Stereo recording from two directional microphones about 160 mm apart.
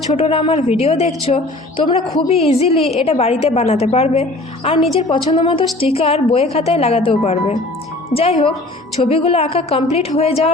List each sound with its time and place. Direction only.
0.1 s a woman's voice: 35° left (ahead or behind)